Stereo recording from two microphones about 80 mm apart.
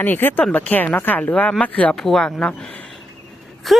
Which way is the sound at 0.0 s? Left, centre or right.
Left.